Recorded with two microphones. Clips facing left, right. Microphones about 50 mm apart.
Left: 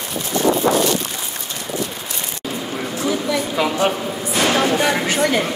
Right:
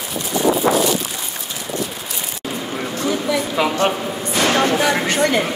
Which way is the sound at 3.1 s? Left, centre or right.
Centre.